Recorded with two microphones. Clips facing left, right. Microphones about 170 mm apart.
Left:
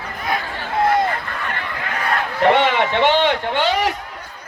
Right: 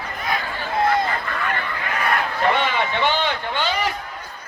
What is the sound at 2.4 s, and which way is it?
A man's voice, 75° left (ahead or behind).